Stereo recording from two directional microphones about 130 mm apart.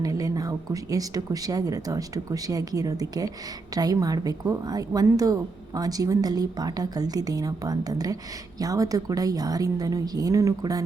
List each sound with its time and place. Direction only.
0.0 s a woman's voice: 25° right (ahead or behind)